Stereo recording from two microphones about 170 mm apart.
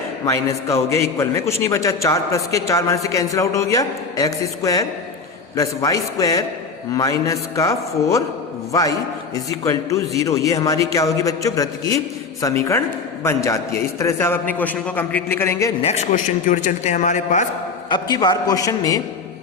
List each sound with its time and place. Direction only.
0.3 s a man's voice: 20° left (ahead or behind)
15.8 s a man's voice: 40° left (ahead or behind)
17.8 s a man's voice: 25° left (ahead or behind)